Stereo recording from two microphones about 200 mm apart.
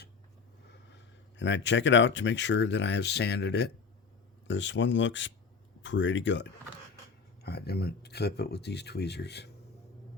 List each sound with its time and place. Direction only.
1.4 s speech: 65° left (ahead or behind)
7.4 s speech: 50° left (ahead or behind)